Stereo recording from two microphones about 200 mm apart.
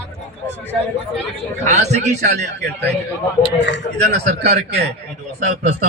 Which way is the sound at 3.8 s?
40° left (ahead or behind).